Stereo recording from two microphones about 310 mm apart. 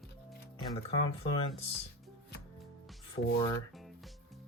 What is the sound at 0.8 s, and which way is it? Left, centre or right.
Speech, centre.